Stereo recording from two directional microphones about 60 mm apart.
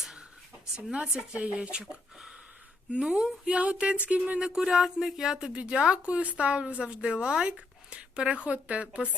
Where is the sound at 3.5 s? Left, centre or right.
Centre.